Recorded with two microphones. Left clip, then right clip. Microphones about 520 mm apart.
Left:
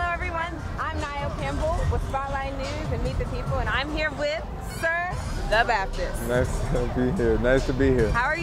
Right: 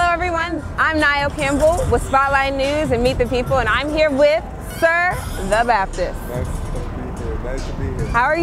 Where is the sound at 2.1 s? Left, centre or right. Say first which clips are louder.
Right 14 dB; right.